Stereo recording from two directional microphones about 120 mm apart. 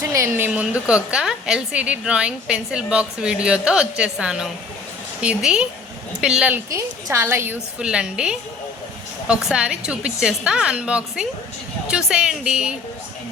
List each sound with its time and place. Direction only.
0.1 s a woman's voice: 20° right (ahead or behind)
6.7 s a woman's voice: 20° right (ahead or behind)
7.8 s a woman's voice: 5° right (ahead or behind)